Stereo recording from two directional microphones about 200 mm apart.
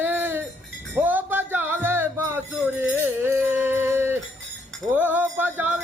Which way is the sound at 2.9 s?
10° right (ahead or behind).